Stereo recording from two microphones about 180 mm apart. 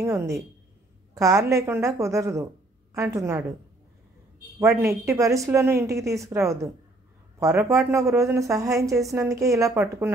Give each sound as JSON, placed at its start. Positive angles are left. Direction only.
{"t": 0.0, "sound": "a woman's voice", "side_deg": -15}
{"t": 4.6, "sound": "a woman's voice", "side_deg": -15}